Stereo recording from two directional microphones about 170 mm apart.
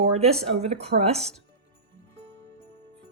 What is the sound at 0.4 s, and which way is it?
Speech, 35° right (ahead or behind).